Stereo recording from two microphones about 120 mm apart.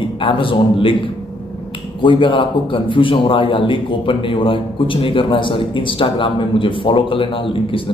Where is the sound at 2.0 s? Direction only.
45° left (ahead or behind).